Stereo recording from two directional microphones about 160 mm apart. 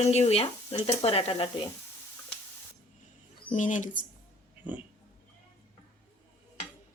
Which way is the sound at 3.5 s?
50° left (ahead or behind).